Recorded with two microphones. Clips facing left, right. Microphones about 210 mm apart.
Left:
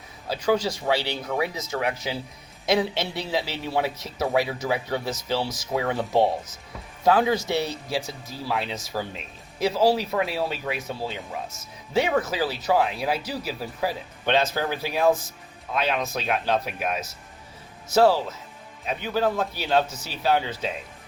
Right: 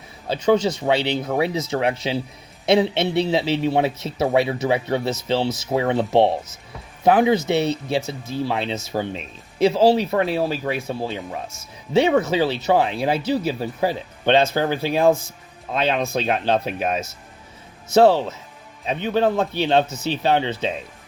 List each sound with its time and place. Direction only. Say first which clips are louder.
0.3 s speech: right 5 dB; 25° right (ahead or behind)
6.0 s speech: right 4 dB; 65° right (ahead or behind)
7.0 s speech: right 4 dB; 20° right (ahead or behind)
18.9 s speech: right 5 dB; 25° right (ahead or behind)